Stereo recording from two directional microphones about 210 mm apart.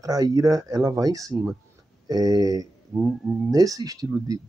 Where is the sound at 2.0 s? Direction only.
20° right (ahead or behind); by 3.5 s centre (ahead or behind).